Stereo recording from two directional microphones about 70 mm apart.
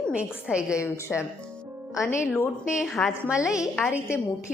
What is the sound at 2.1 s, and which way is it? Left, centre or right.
Speech, left.